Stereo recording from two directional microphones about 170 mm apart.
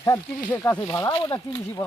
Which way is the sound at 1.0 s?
20° left (ahead or behind).